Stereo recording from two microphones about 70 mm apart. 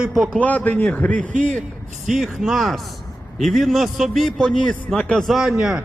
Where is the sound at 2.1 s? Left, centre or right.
Centre.